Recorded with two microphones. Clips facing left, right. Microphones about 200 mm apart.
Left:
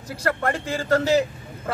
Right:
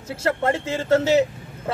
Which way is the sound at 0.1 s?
25° right (ahead or behind).